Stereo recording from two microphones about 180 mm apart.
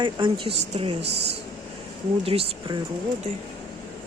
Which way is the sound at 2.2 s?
35° right (ahead or behind).